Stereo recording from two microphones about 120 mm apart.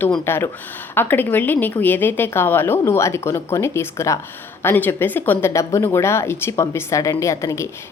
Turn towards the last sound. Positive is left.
turn(degrees=25)  # may be behind; listen again after turning